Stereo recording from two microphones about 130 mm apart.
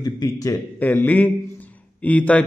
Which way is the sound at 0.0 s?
30° left (ahead or behind).